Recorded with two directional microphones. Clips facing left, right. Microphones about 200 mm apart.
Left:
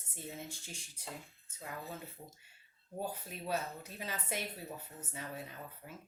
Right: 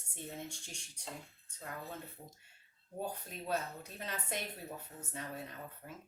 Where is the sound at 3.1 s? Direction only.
5° left (ahead or behind).